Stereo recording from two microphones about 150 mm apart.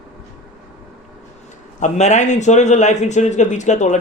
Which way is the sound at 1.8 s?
50° left (ahead or behind).